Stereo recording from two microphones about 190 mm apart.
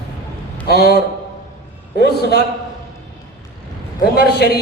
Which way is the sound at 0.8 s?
60° right (ahead or behind).